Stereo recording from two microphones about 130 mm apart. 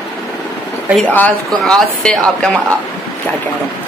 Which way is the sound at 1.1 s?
10° left (ahead or behind).